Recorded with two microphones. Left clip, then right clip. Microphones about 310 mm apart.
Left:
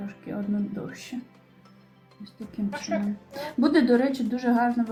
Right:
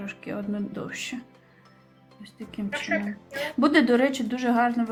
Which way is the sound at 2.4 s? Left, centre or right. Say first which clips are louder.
Right 2 dB; centre.